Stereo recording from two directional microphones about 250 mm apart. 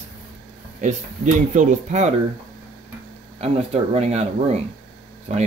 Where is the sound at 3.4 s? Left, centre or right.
Right.